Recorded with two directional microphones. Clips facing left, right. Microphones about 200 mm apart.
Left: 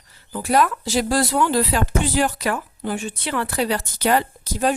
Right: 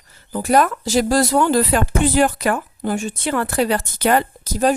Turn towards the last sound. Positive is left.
turn(degrees=-45)  # may be behind; listen again after turning